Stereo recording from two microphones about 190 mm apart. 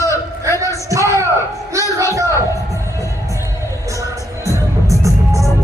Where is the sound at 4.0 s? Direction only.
15° right (ahead or behind).